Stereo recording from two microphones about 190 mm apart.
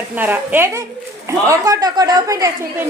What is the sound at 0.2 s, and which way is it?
A woman's voice, 10° right (ahead or behind).